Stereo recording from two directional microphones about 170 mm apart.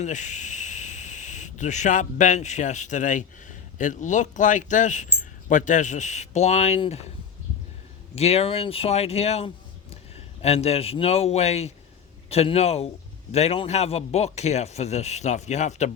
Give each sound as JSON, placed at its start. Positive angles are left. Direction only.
{"t": 0.0, "sound": "speech", "side_deg": 45}
{"t": 8.1, "sound": "a man's voice", "side_deg": 35}